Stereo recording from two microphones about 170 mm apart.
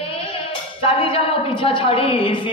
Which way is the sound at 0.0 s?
30° left (ahead or behind).